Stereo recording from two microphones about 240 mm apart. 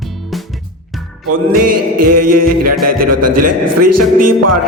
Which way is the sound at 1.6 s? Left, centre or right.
Right.